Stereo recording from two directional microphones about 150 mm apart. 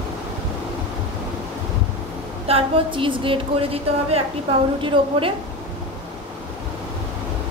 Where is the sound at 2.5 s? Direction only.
35° right (ahead or behind).